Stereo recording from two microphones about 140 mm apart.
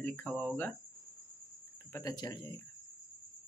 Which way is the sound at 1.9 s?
25° left (ahead or behind).